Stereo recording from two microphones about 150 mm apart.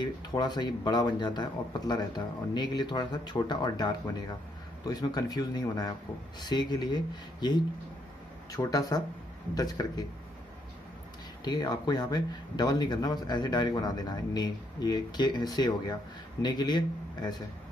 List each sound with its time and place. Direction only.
0.0 s speech: 30° left (ahead or behind)
11.4 s speech: 25° left (ahead or behind)